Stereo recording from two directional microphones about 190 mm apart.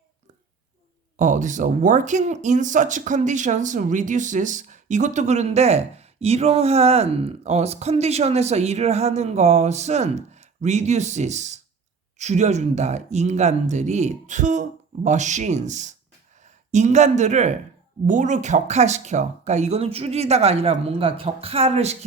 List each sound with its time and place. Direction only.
1.1 s speech: 40° right (ahead or behind)